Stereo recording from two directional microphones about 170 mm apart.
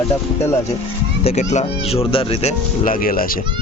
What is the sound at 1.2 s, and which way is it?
Speech, 40° left (ahead or behind).